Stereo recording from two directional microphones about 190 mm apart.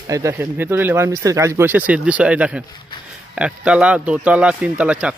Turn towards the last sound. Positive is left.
turn(degrees=-5)  # may be behind; listen again after turning